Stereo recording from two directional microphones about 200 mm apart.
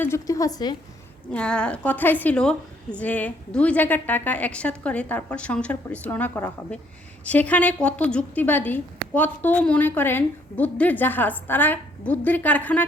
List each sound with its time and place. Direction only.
0.0 s a woman's voice: 15° left (ahead or behind)
1.3 s a woman's voice: 5° left (ahead or behind)